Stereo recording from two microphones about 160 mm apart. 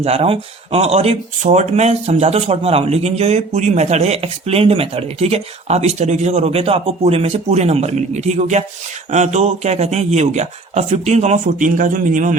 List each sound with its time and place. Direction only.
0.0 s speech: 40° right (ahead or behind)